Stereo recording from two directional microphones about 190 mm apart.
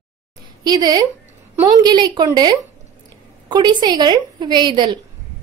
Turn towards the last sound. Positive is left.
turn(degrees=-25)  # may be behind; listen again after turning